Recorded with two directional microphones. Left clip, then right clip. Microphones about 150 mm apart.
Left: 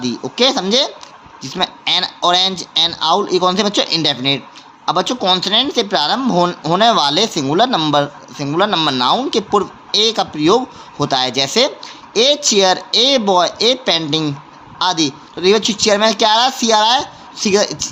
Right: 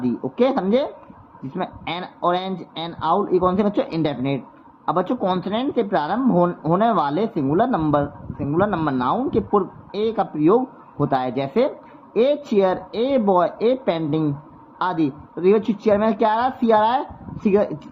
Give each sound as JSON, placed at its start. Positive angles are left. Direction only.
{"t": 0.2, "sound": "speech", "side_deg": 20}